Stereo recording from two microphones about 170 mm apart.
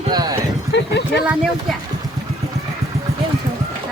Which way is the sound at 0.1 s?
25° right (ahead or behind).